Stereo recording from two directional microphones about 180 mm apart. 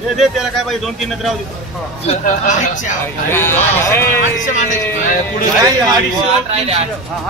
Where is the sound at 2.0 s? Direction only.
45° left (ahead or behind).